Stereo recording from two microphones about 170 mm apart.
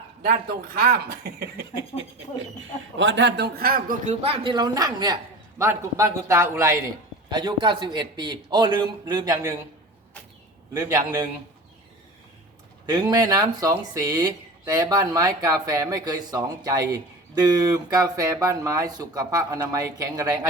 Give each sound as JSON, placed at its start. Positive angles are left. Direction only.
{"t": 0.2, "sound": "a man's voice", "side_deg": -65}
{"t": 2.6, "sound": "a man's voice", "side_deg": -90}
{"t": 10.8, "sound": "a man's voice", "side_deg": -15}
{"t": 12.8, "sound": "speech", "side_deg": -25}